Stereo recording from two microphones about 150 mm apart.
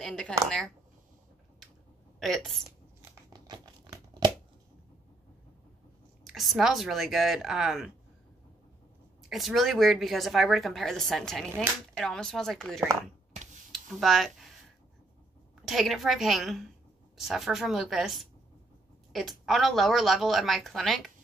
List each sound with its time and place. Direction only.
0.0 s speech: 5° left (ahead or behind)
2.1 s a woman's voice: centre (ahead or behind)
3.0 s crumpling: 25° right (ahead or behind)
6.3 s speech: centre (ahead or behind)
9.3 s speech: centre (ahead or behind)
13.7 s a sound: centre (ahead or behind)
15.6 s speech: centre (ahead or behind)